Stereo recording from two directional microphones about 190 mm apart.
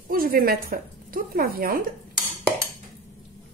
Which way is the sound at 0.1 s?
50° right (ahead or behind).